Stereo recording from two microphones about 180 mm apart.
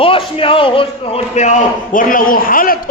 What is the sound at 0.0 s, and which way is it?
A man's voice, 30° left (ahead or behind).